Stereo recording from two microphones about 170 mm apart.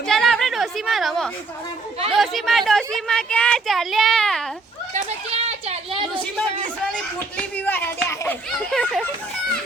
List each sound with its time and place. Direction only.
0.0 s chatter: centre (ahead or behind)
2.1 s speech: centre (ahead or behind)
4.9 s a sound: 40° right (ahead or behind)
7.3 s a child's voice: 10° left (ahead or behind)